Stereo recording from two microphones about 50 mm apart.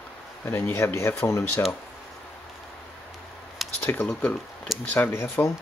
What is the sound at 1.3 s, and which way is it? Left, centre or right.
Speech, left.